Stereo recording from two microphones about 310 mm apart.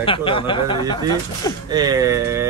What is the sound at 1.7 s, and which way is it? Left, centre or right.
Speech, centre.